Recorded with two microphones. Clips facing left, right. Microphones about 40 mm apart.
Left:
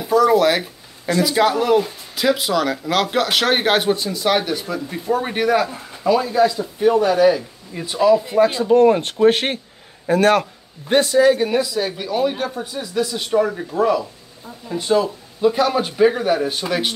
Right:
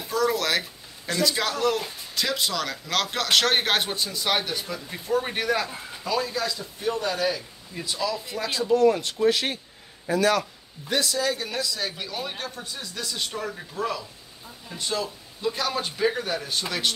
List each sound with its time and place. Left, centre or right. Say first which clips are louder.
0.0 s a sound: left 10 dB; centre
1.3 s a man's voice: left 9 dB; centre; by 10.4 s left
10.9 s speech: left 11 dB; left